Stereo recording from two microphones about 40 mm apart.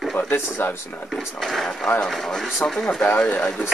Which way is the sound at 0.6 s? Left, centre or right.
Left.